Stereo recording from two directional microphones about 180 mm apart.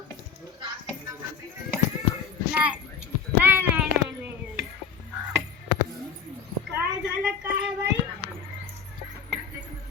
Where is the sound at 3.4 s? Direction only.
10° right (ahead or behind).